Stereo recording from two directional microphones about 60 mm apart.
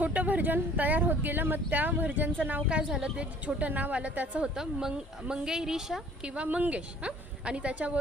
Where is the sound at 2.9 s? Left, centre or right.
Centre.